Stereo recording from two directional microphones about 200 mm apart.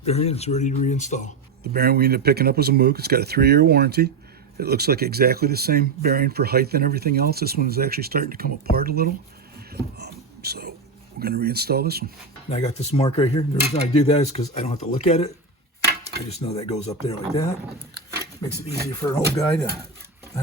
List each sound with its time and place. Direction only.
0.0 s speech: 30° left (ahead or behind)
1.6 s speech: 50° right (ahead or behind)
9.6 s a sound: 50° right (ahead or behind)
11.2 s speech: 50° right (ahead or behind)
12.5 s speech: 30° left (ahead or behind)
16.4 s speech: 30° left (ahead or behind)
16.9 s speech: 15° left (ahead or behind)
18.9 s speech: 15° left (ahead or behind)